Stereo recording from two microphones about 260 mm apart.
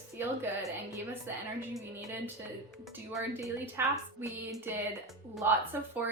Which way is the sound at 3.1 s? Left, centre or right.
Centre.